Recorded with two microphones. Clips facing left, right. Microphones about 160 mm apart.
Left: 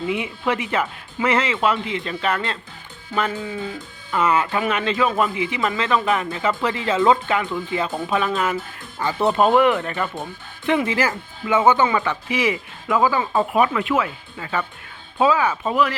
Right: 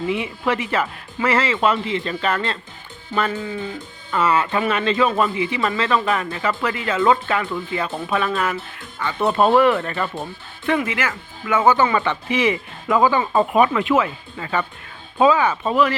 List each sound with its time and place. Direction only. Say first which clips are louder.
0.1 s speech: even; 15° left (ahead or behind)
7.0 s speech: even; 15° left (ahead or behind)
8.5 s speech: left 2 dB; 35° left (ahead or behind)
9.3 s speech: right 2 dB; 15° left (ahead or behind)
10.9 s speech: left 3 dB; 35° left (ahead or behind)
11.4 s speech: even; 20° left (ahead or behind)
11.9 s speech: right 1 dB; 10° left (ahead or behind)